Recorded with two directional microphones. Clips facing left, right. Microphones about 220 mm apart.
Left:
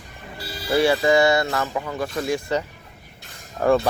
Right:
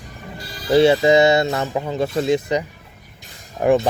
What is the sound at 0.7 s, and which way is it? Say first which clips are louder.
Speech: right 5 dB; 20° right (ahead or behind).